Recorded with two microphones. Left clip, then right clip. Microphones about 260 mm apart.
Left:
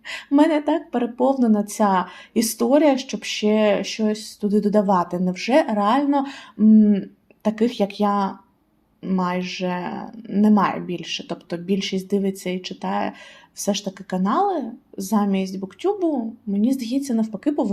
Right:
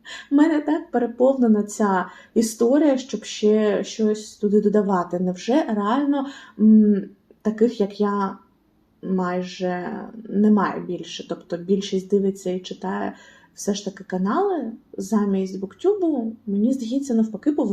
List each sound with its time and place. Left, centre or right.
0.3 s speech: left